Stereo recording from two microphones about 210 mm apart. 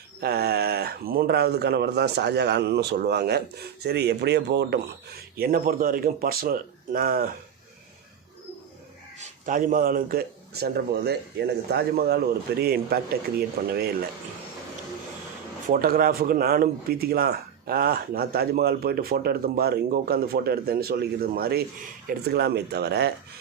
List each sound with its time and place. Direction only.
0.2 s speech: 50° right (ahead or behind)
9.1 s speech: 40° right (ahead or behind)
15.7 s speech: 45° right (ahead or behind)